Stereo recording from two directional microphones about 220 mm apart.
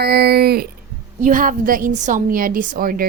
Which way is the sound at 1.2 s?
40° right (ahead or behind).